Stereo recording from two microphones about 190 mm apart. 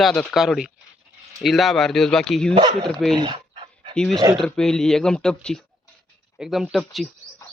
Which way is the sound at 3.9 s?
5° left (ahead or behind).